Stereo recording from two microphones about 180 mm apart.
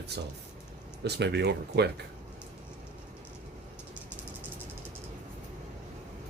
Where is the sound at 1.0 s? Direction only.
70° right (ahead or behind).